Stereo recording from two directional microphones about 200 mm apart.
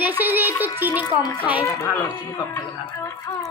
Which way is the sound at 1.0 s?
20° left (ahead or behind).